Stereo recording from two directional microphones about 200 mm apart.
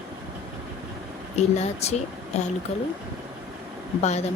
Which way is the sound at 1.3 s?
30° left (ahead or behind).